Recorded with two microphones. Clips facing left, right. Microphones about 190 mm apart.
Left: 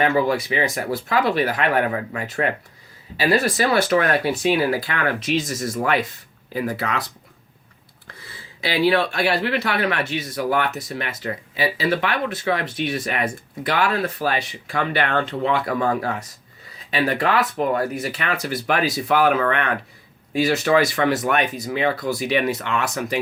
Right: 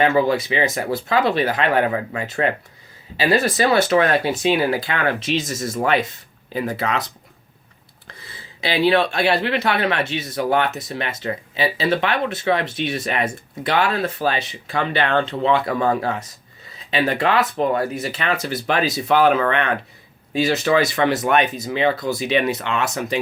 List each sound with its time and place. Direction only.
0.0 s speech: 25° right (ahead or behind)
8.6 s speech: 25° right (ahead or behind)